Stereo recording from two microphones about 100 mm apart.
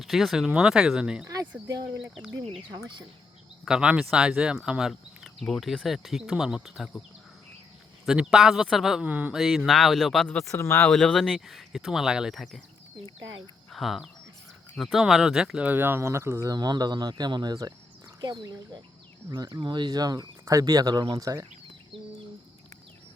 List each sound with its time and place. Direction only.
0.0 s speech: centre (ahead or behind)
1.6 s speech: 35° right (ahead or behind)
3.7 s speech: 10° right (ahead or behind)
8.0 s speech: 5° right (ahead or behind)
9.0 s speech: 15° right (ahead or behind)
9.3 s speech: centre (ahead or behind)
10.5 s speech: 25° left (ahead or behind)
10.8 s speech: centre (ahead or behind)
13.7 s speech: centre (ahead or behind)
15.7 s speech: 20° right (ahead or behind)
16.5 s speech: 40° right (ahead or behind)